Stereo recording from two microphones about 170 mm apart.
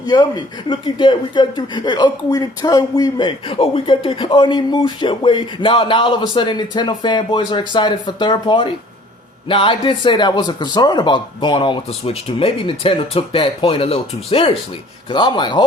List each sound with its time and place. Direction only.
0.0 s speech: 25° left (ahead or behind)